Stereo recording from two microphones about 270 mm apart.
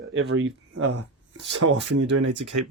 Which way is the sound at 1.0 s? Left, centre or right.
Right.